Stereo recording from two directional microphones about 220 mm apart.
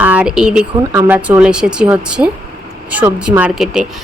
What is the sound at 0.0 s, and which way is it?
Speech, 5° right (ahead or behind).